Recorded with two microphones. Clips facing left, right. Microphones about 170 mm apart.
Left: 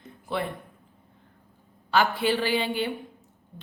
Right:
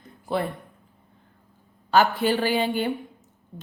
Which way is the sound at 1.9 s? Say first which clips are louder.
Right 3 dB; 45° right (ahead or behind).